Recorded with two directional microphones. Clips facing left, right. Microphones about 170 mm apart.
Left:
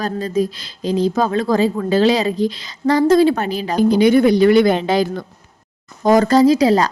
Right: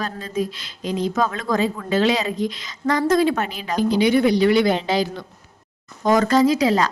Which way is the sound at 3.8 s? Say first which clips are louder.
Left 5 dB; 50° left (ahead or behind).